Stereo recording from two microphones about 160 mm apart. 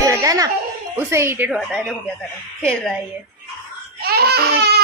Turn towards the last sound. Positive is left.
turn(degrees=-90)